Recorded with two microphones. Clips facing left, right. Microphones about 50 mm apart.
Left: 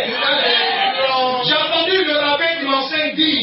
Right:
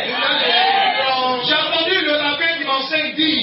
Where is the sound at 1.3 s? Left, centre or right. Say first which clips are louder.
Left 1 dB; right.